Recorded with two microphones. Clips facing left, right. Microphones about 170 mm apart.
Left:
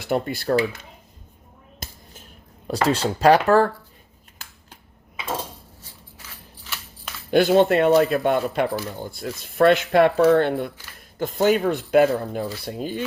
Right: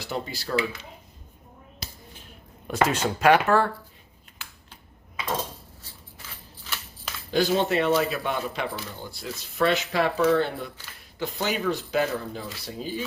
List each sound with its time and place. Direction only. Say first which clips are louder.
0.0 s speech: left 8 dB; 55° left (ahead or behind)
1.8 s finger snapping: left 2 dB; 50° left (ahead or behind)
2.6 s speech: left 3 dB; 35° left (ahead or behind)
7.3 s speech: left 7 dB; 60° left (ahead or behind)